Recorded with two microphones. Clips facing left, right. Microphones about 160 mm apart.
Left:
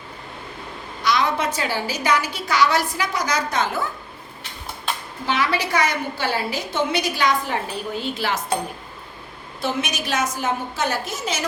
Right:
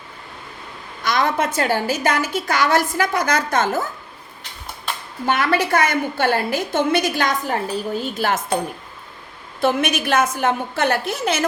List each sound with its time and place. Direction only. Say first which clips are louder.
1.0 s a woman's voice: right 1 dB; 50° right (ahead or behind)
5.2 s a woman's voice: right 4 dB; 50° right (ahead or behind)
9.6 s a woman's voice: right 6 dB; 55° right (ahead or behind)